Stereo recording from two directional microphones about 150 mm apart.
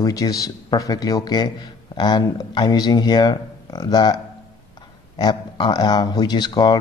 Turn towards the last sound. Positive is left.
turn(degrees=30)  # may be behind; listen again after turning